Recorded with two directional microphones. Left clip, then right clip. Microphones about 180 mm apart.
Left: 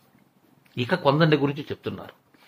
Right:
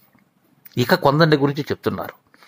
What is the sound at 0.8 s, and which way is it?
Speech, 40° right (ahead or behind).